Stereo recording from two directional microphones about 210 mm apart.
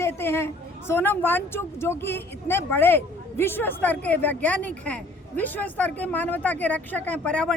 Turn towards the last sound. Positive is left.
turn(degrees=5)  # may be behind; listen again after turning